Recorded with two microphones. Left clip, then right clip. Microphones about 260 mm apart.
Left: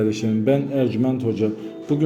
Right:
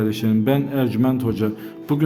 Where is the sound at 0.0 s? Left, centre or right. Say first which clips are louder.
Even; centre.